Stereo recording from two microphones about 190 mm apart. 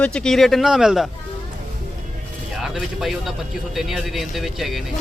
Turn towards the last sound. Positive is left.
turn(degrees=0)  # may be behind; listen again after turning